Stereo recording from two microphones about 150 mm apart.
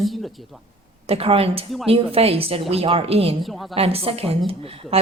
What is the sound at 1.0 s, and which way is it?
A woman's voice, 40° right (ahead or behind).